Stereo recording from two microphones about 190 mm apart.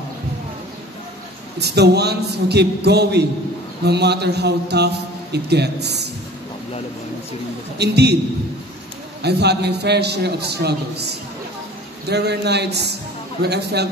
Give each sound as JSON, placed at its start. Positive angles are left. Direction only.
{"t": 1.6, "sound": "a man's voice", "side_deg": -60}
{"t": 7.8, "sound": "a man's voice", "side_deg": -60}
{"t": 9.2, "sound": "a man's voice", "side_deg": -60}